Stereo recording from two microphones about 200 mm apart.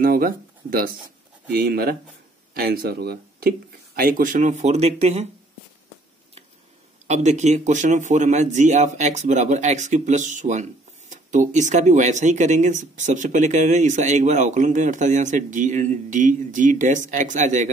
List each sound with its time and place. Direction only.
0.0 s speech: 45° right (ahead or behind)
7.1 s speech: 35° right (ahead or behind)